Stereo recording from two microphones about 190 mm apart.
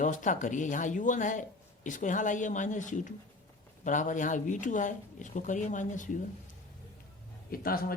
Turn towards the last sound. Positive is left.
turn(degrees=50)  # may be behind; listen again after turning